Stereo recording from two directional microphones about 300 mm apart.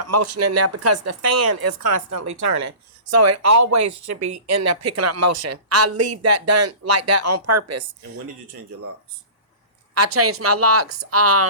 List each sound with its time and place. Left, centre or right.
0.1 s speech: right
10.2 s speech: right